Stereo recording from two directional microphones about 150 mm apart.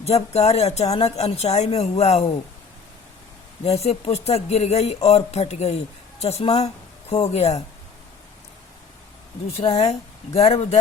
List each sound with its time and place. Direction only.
0.0 s speech: 45° left (ahead or behind)
3.6 s speech: 45° left (ahead or behind)
9.5 s speech: 40° left (ahead or behind)